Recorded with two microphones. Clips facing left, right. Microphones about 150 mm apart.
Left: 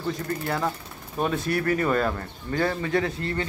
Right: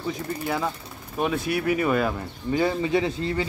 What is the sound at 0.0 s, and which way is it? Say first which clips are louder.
Speech: even; 5° right (ahead or behind).